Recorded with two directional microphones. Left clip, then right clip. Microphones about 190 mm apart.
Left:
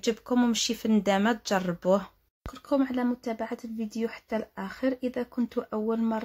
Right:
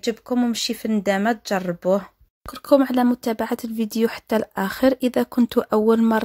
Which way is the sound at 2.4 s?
45° right (ahead or behind).